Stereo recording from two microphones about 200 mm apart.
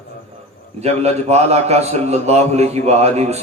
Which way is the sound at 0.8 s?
30° right (ahead or behind).